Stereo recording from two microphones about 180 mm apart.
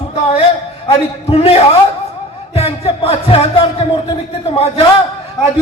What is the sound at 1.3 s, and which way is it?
Speech, 35° left (ahead or behind).